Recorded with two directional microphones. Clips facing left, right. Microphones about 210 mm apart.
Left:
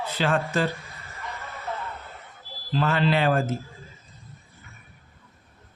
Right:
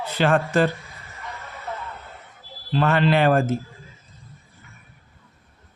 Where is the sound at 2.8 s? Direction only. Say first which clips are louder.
Right 4 dB; 60° right (ahead or behind).